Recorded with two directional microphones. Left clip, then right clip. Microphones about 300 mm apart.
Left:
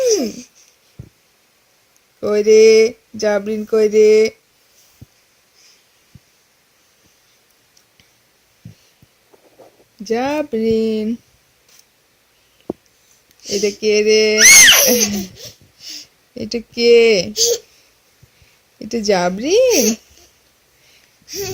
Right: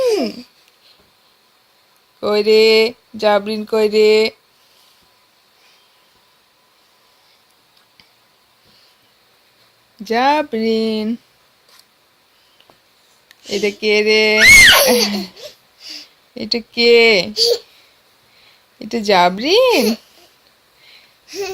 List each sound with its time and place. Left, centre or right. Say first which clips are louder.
0.0 s babbling: even; centre
2.4 s speech: left 2 dB; centre
3.2 s speech: right 3 dB; right
3.4 s speech: left 1 dB; centre
10.0 s speech: right 4 dB; centre
13.2 s a sound: even; centre
13.7 s speech: even; centre
14.6 s laughter: right 1 dB; centre
16.7 s speech: even; centre
18.8 s speech: right 4 dB; centre
21.2 s babbling: right 1 dB; centre